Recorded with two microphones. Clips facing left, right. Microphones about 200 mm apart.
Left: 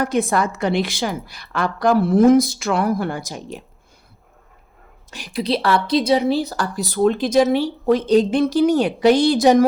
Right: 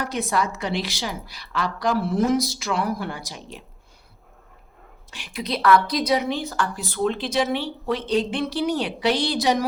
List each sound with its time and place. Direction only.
0.0 s a woman's voice: 50° left (ahead or behind)
5.1 s speech: 35° left (ahead or behind)